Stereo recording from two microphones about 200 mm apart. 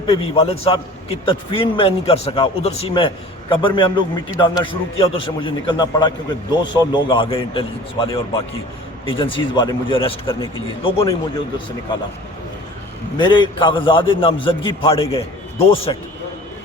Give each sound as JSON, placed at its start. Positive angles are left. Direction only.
{"t": 0.1, "sound": "a man's voice", "side_deg": 30}
{"t": 13.1, "sound": "a man's voice", "side_deg": 25}